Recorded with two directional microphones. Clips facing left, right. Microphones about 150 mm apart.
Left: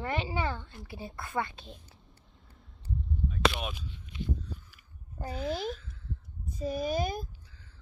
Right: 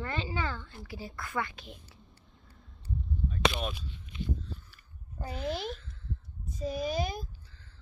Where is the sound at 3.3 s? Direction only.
5° left (ahead or behind).